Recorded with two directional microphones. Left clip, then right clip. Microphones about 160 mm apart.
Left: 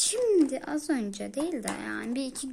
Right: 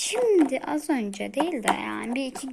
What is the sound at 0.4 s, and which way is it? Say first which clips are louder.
Speech: right 4 dB; centre (ahead or behind).